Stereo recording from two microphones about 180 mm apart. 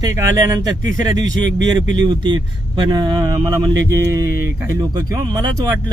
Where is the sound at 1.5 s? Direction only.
85° right.